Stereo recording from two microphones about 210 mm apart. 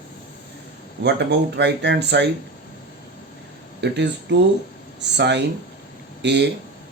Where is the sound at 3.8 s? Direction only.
55° right (ahead or behind).